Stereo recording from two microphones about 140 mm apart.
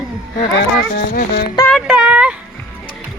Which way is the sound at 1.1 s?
90° left.